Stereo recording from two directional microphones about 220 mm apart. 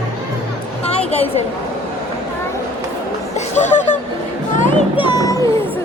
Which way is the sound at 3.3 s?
35° left (ahead or behind).